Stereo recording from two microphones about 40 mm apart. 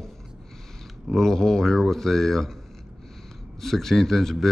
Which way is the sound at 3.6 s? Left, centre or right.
Centre.